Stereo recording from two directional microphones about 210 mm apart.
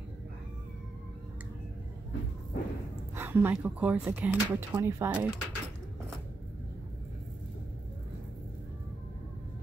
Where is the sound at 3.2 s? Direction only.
10° right (ahead or behind).